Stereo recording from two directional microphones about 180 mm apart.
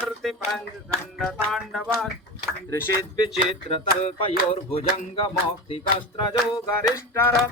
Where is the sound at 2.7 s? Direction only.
20° left (ahead or behind).